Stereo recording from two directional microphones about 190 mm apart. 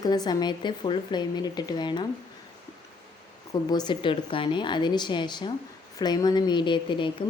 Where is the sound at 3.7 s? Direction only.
25° left (ahead or behind).